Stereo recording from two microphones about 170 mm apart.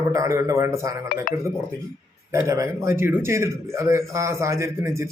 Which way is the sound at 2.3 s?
15° right (ahead or behind).